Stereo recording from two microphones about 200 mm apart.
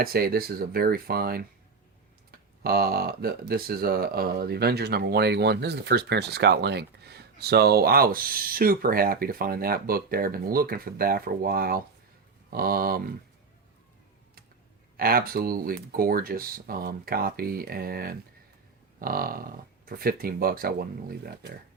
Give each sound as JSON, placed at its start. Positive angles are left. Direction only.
{"t": 0.0, "sound": "speech", "side_deg": -50}
{"t": 2.6, "sound": "speech", "side_deg": -50}
{"t": 14.9, "sound": "speech", "side_deg": -50}